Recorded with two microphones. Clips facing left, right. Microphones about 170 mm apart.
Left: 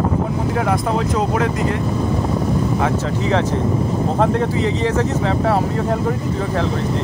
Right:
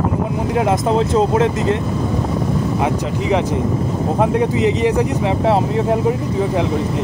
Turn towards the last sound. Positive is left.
turn(degrees=-15)  # may be behind; listen again after turning